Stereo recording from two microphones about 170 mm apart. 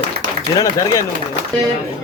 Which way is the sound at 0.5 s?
20° left (ahead or behind).